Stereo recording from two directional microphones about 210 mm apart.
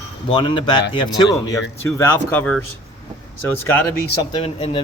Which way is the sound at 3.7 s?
15° left (ahead or behind).